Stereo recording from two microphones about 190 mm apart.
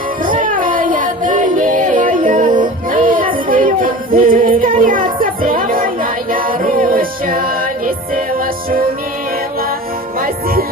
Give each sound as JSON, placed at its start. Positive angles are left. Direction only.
{"t": 0.2, "sound": "music", "side_deg": -45}
{"t": 10.2, "sound": "music", "side_deg": -50}